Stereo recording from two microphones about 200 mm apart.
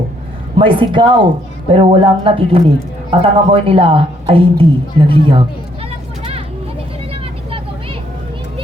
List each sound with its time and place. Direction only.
0.6 s a woman's voice: 25° right (ahead or behind)